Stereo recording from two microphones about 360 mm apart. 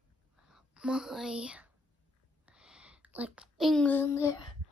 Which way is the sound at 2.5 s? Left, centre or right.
Centre.